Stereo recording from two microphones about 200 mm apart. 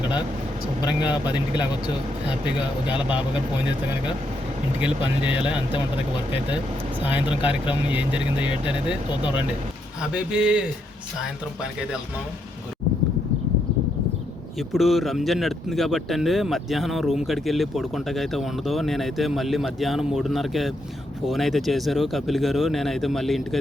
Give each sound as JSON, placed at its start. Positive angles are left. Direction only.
{"t": 1.0, "sound": "speech", "side_deg": 20}
{"t": 4.8, "sound": "speech", "side_deg": -5}
{"t": 5.5, "sound": "speech", "side_deg": 25}
{"t": 7.0, "sound": "speech", "side_deg": -5}
{"t": 8.4, "sound": "speech", "side_deg": 25}
{"t": 10.0, "sound": "speech", "side_deg": -5}
{"t": 11.6, "sound": "speech", "side_deg": -5}
{"t": 14.7, "sound": "speech", "side_deg": 0}